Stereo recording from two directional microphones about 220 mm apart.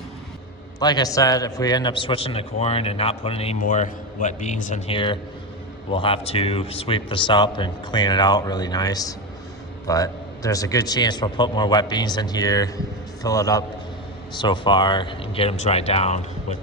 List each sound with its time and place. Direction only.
0.8 s a man's voice: 15° left (ahead or behind)